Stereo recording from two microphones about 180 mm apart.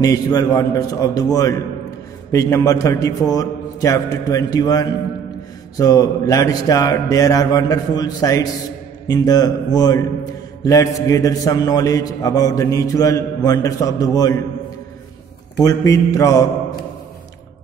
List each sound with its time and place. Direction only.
0.0 s a man's voice: 20° left (ahead or behind)
15.6 s a man's voice: 15° left (ahead or behind)